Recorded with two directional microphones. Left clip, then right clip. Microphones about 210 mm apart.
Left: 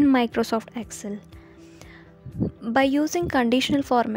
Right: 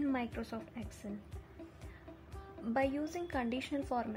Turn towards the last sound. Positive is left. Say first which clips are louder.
# left 16 dB
turn(degrees=50)  # may be behind; listen again after turning